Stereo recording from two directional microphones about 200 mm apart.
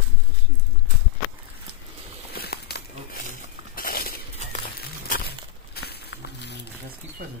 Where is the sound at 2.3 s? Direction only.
50° left (ahead or behind).